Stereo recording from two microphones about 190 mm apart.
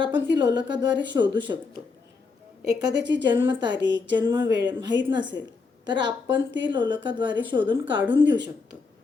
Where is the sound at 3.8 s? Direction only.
70° right (ahead or behind).